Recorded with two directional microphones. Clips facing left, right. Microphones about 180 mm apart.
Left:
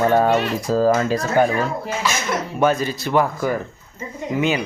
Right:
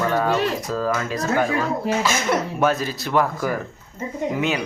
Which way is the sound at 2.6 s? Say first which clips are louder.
Left 2 dB; centre (ahead or behind).